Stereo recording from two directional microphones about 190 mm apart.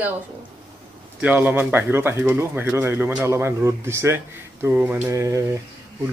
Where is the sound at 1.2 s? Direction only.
10° right (ahead or behind).